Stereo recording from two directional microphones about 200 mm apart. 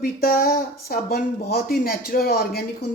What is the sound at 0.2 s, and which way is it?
Speech, 50° left (ahead or behind).